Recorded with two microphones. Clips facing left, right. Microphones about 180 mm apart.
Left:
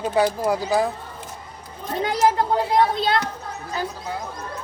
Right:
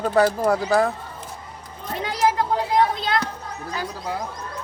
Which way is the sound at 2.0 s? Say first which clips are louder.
Left 2 dB; 30° left (ahead or behind).